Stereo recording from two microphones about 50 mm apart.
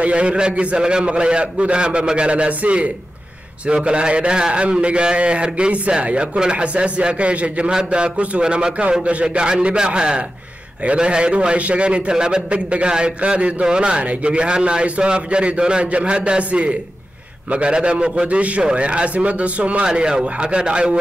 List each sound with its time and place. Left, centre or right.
0.0 s a man's voice: right
19.9 s a man's voice: centre